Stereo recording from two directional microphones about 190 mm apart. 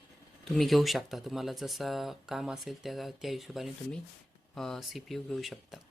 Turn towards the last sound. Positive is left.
turn(degrees=0)  # may be behind; listen again after turning